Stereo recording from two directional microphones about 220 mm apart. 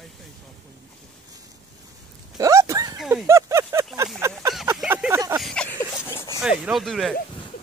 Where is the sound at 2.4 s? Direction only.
15° right (ahead or behind).